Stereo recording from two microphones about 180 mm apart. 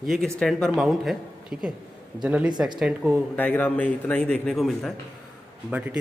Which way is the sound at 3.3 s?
10° left (ahead or behind).